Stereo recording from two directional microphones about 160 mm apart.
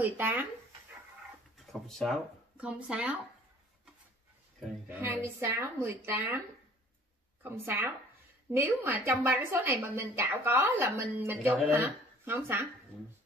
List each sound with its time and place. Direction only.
0.0 s a woman's voice: 10° right (ahead or behind)
1.7 s a woman's voice: 5° left (ahead or behind)
4.8 s a woman's voice: 15° right (ahead or behind)
7.4 s a woman's voice: 15° right (ahead or behind)